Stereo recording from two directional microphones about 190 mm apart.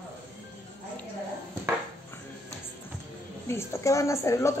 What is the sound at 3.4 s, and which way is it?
Speech, 15° left (ahead or behind).